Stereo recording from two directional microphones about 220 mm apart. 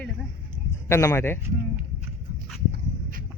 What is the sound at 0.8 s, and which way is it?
Speech, 10° left (ahead or behind).